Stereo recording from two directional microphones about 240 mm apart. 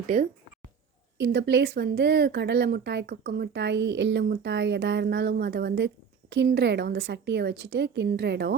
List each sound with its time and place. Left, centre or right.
1.2 s speech: right